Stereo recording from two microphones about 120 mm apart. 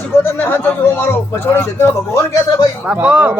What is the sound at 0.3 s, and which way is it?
Speech, 20° left (ahead or behind).